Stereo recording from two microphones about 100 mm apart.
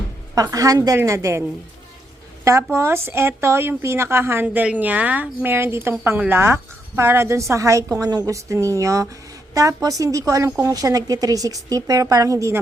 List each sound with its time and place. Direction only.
0.3 s a woman's voice: 35° right (ahead or behind)